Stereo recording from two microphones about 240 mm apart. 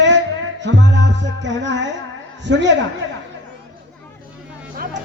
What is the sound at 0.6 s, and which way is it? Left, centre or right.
Music, right.